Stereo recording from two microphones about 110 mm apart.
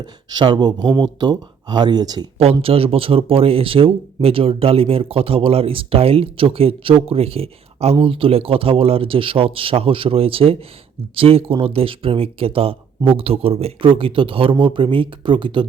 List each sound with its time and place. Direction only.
0.0 s speech: 45° right (ahead or behind)
2.4 s speech: 60° right (ahead or behind)